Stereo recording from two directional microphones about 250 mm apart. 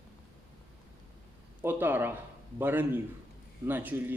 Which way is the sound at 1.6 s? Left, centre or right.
Centre.